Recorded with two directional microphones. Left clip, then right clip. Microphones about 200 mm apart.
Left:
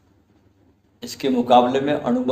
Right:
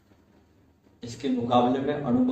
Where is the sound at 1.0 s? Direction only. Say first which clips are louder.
Left 7 dB; 45° left (ahead or behind).